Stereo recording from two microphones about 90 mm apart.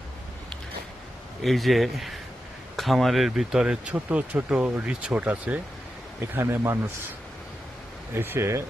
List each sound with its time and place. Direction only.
1.4 s speech: centre (ahead or behind); by 5.5 s 15° right (ahead or behind)
6.3 s speech: 30° right (ahead or behind)
8.1 s speech: 25° right (ahead or behind)